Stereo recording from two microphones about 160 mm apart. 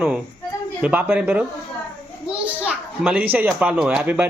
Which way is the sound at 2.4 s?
10° right (ahead or behind).